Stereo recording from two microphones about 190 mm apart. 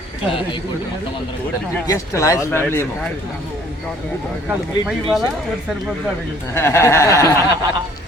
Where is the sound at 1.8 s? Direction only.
15° left (ahead or behind).